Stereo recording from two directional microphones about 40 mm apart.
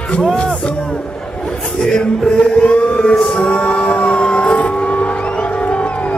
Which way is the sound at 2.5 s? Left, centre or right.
Left.